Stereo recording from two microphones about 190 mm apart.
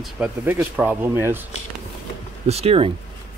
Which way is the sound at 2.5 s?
30° right (ahead or behind).